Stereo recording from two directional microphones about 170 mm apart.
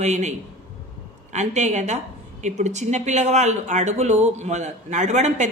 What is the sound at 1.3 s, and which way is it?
A woman's voice, 45° right (ahead or behind).